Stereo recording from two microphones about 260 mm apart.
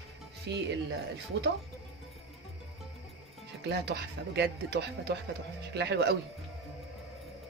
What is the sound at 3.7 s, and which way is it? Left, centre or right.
Speech, right.